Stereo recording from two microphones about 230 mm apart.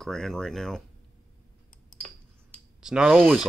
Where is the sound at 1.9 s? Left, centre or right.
Left.